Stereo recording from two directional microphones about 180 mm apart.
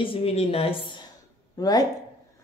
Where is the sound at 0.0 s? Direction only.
30° left (ahead or behind).